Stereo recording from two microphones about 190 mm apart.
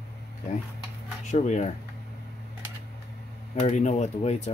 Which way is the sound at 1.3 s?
35° left (ahead or behind).